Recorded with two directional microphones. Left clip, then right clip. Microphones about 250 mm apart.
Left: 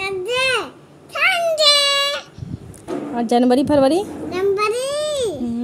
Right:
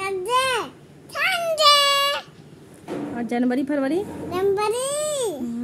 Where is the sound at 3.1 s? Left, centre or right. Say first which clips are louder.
Left 9 dB; centre.